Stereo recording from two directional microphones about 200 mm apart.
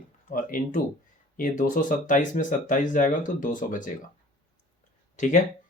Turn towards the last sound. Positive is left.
turn(degrees=40)  # may be behind; listen again after turning